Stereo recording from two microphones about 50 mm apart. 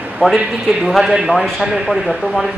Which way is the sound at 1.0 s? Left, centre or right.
Centre.